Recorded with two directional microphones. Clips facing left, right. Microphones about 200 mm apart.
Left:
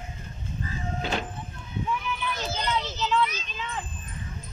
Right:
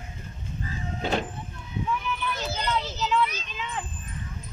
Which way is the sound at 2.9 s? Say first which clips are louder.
Even; 10° right (ahead or behind).